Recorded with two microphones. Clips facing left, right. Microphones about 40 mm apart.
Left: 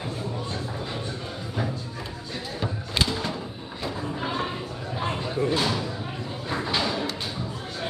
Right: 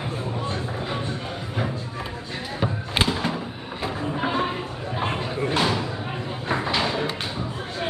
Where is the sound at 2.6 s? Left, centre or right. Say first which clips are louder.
Right 3 dB; right.